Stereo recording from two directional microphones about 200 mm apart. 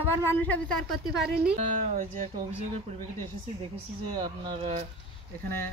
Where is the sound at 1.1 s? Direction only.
55° right (ahead or behind).